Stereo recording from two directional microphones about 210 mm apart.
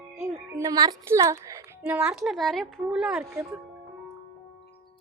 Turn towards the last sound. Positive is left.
turn(degrees=-10)  # may be behind; listen again after turning